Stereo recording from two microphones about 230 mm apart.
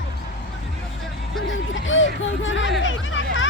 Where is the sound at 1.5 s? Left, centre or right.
Left.